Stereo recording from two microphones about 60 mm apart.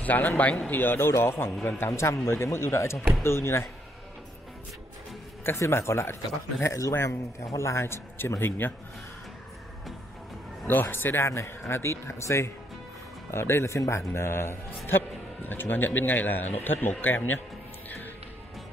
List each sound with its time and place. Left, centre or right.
0.0 s a man's voice: left
0.7 s a man's voice: left
5.6 s a man's voice: left
10.7 s a man's voice: left
11.2 s a man's voice: left
13.3 s a man's voice: left